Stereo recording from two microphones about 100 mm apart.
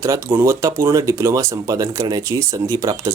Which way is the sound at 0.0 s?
30° right (ahead or behind).